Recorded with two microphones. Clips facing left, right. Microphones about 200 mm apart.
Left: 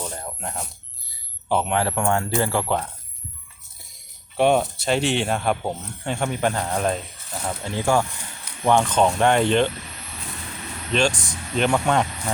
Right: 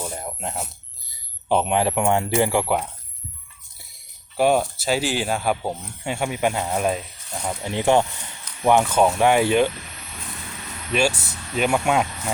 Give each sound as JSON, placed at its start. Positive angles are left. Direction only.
{"t": 0.0, "sound": "a sound", "side_deg": -10}
{"t": 1.5, "sound": "speech", "side_deg": -20}
{"t": 4.4, "sound": "speech", "side_deg": -5}
{"t": 7.4, "sound": "speech", "side_deg": -20}
{"t": 8.6, "sound": "speech", "side_deg": -10}
{"t": 10.9, "sound": "speech", "side_deg": -10}